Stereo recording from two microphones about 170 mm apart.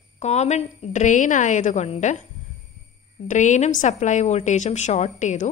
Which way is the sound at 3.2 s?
45° left (ahead or behind).